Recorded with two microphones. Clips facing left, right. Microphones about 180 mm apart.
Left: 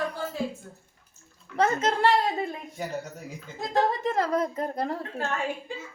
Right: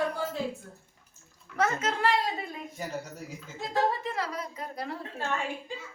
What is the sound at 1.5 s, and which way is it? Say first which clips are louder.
Speech: left 4 dB; 30° left (ahead or behind).